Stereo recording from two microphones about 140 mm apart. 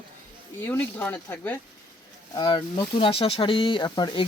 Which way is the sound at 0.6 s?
15° left (ahead or behind).